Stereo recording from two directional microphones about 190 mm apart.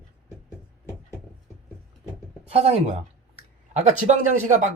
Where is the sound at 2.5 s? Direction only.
35° right (ahead or behind).